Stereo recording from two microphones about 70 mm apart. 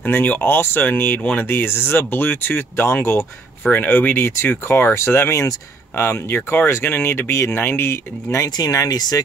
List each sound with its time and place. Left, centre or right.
0.1 s speech: left
3.7 s speech: left
8.5 s speech: left